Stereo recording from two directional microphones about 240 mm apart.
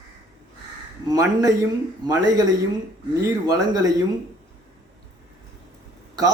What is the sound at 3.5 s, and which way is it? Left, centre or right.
Speech, centre.